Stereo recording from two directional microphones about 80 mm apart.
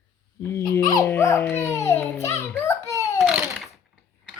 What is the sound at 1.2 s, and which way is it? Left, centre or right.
Babbling, left.